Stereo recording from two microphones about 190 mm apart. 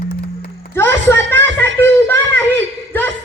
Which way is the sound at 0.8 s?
15° left (ahead or behind).